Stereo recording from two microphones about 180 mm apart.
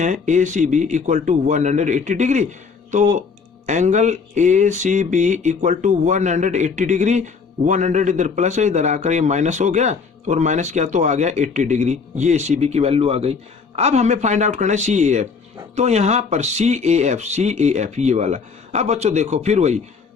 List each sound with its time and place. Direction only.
0.0 s a man's voice: 40° right (ahead or behind)